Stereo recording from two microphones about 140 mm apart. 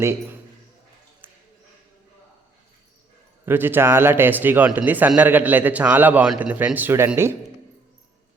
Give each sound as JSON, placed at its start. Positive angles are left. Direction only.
{"t": 0.0, "sound": "a man's voice", "side_deg": -20}
{"t": 3.4, "sound": "a man's voice", "side_deg": -15}